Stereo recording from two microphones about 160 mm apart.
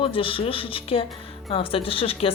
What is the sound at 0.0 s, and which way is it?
A woman's voice, 35° left (ahead or behind).